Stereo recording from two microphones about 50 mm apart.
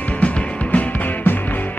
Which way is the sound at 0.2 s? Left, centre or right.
Left.